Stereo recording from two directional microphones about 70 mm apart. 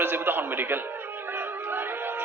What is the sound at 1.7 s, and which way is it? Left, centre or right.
Music, right.